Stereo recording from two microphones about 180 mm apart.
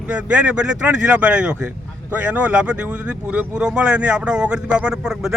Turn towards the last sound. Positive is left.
turn(degrees=-5)  # may be behind; listen again after turning